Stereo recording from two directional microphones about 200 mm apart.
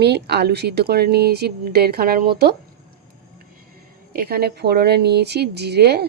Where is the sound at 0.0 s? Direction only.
55° right (ahead or behind).